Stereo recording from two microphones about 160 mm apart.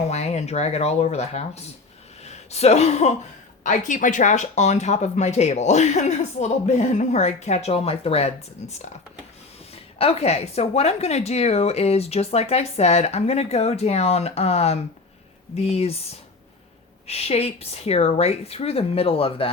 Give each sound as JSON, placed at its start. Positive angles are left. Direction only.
{"t": 0.1, "sound": "a woman's voice", "side_deg": 45}
{"t": 17.1, "sound": "a woman's voice", "side_deg": 40}